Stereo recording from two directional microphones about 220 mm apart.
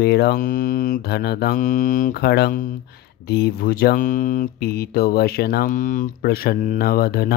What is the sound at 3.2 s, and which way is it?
Speech, 45° left (ahead or behind).